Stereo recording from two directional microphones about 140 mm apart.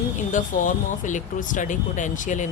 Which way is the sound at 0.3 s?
65° left (ahead or behind).